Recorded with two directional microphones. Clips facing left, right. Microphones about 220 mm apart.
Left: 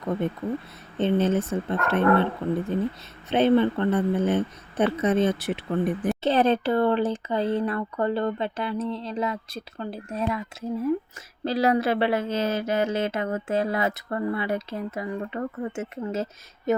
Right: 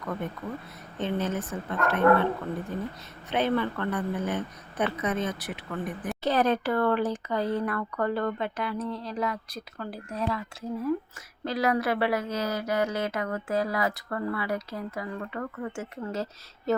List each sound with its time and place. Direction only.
0.0 s speech: 25° left (ahead or behind)
11.4 s speech: 30° left (ahead or behind)